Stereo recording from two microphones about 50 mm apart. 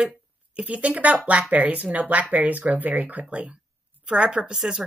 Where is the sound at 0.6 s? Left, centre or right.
Right.